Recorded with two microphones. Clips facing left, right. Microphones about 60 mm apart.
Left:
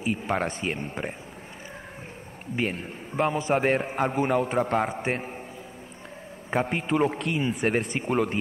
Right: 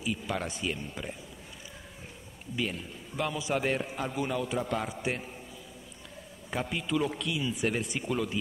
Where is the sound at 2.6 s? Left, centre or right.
Left.